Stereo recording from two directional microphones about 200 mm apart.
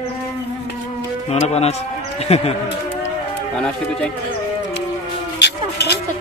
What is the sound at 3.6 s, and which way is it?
Speech, 5° left (ahead or behind).